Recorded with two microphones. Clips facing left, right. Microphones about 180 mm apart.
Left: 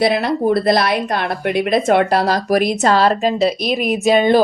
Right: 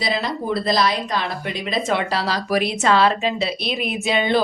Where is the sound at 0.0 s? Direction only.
60° left (ahead or behind).